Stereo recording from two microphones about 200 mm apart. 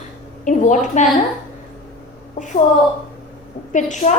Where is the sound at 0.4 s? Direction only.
40° left (ahead or behind).